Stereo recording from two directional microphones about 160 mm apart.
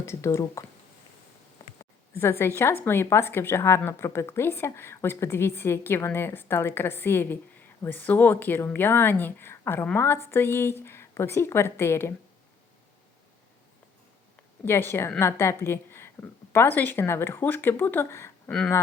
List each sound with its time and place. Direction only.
0.0 s speech: 15° left (ahead or behind)
1.8 s a sound: 15° left (ahead or behind)
2.6 s speech: 15° left (ahead or behind)
14.6 s a woman's voice: 15° left (ahead or behind)